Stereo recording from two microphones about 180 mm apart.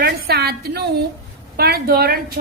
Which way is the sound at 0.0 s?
60° right (ahead or behind).